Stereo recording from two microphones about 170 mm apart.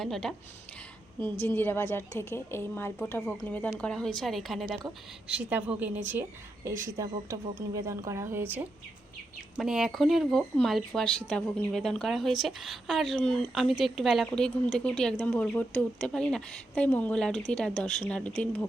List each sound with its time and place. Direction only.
0.0 s speech: 5° left (ahead or behind)
1.2 s speech: 15° left (ahead or behind)